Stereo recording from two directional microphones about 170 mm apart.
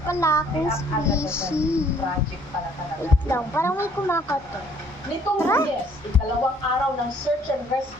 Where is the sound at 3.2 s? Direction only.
15° left (ahead or behind).